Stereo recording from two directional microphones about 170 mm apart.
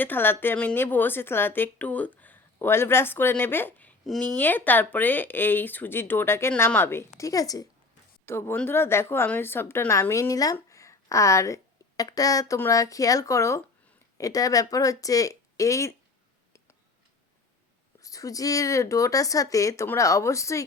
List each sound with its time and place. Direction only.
0.0 s a woman's voice: 10° left (ahead or behind)
18.0 s speech: 20° left (ahead or behind)